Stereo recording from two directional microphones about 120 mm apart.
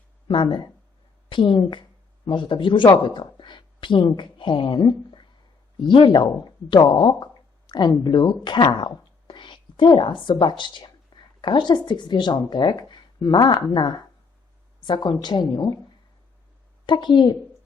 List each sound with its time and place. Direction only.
0.3 s a woman's voice: 45° left (ahead or behind)
16.8 s speech: 40° left (ahead or behind)